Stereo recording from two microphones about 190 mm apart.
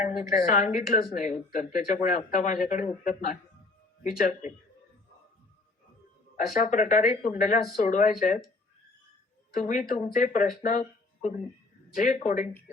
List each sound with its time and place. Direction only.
0.3 s speech: 45° left (ahead or behind)
6.3 s speech: 40° left (ahead or behind)
9.6 s speech: 45° left (ahead or behind)